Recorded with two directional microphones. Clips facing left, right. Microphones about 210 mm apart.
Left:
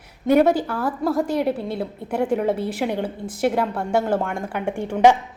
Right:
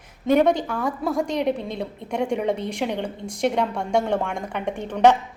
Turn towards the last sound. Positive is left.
turn(degrees=10)  # may be behind; listen again after turning